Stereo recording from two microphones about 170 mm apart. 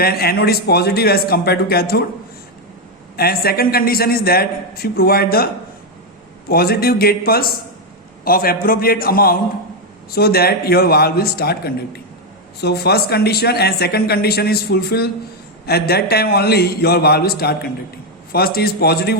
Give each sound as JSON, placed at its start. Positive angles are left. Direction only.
{"t": 0.0, "sound": "a man's voice", "side_deg": 65}
{"t": 3.2, "sound": "a man's voice", "side_deg": 65}
{"t": 6.5, "sound": "a man's voice", "side_deg": 65}